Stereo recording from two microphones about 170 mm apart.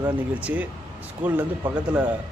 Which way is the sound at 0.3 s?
10° right (ahead or behind).